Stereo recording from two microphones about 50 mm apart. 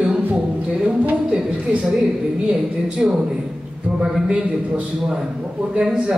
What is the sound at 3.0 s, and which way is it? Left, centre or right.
Speech, centre.